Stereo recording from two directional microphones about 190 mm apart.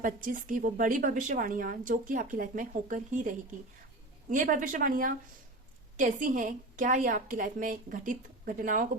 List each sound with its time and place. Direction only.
0.0 s a woman's voice: 45° right (ahead or behind)